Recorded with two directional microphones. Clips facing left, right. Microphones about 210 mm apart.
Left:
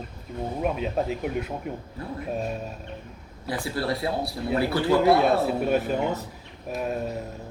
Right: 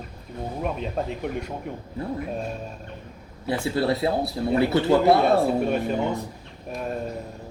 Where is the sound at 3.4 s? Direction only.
25° right (ahead or behind).